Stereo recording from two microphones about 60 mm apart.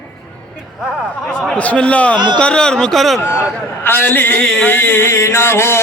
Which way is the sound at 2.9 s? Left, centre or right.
Centre.